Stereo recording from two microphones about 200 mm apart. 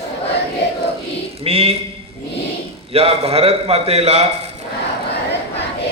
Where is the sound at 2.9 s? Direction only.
30° right (ahead or behind).